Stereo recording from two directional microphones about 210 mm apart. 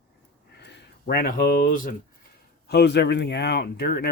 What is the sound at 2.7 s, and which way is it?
Speech, 50° left (ahead or behind).